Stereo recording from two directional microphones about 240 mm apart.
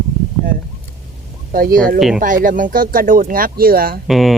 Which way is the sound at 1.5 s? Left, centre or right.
Right.